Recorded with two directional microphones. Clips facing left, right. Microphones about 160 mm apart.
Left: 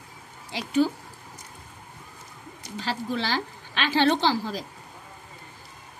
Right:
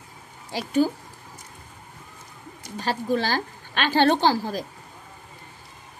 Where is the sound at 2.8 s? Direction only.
45° right (ahead or behind).